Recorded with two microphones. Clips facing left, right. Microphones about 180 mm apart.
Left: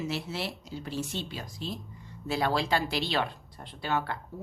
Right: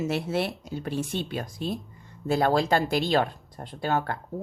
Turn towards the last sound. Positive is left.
turn(degrees=-45)  # may be behind; listen again after turning